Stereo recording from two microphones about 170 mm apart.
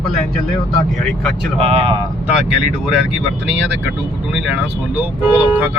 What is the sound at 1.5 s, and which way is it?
Speech, 35° right (ahead or behind).